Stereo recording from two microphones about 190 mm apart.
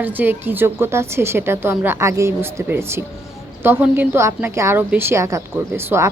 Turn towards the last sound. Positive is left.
turn(degrees=-15)  # may be behind; listen again after turning